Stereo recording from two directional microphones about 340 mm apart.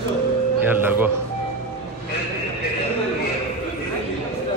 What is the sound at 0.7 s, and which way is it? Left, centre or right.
Speech, centre.